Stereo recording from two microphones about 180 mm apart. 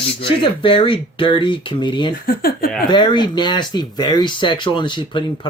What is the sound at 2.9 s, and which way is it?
Speech, 25° left (ahead or behind).